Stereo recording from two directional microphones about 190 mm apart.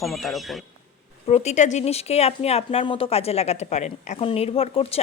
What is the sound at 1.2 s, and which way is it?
Speech, 35° left (ahead or behind).